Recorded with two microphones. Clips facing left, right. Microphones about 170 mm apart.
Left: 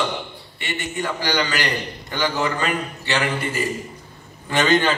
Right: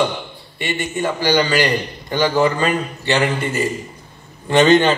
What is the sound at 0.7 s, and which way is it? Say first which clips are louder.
A man's voice: right 5 dB; 20° right (ahead or behind).